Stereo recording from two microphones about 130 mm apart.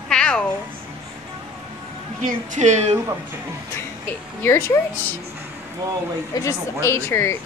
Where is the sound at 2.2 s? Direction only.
75° right (ahead or behind).